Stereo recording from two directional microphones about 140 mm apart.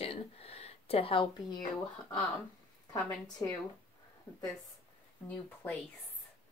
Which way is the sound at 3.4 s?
20° left (ahead or behind).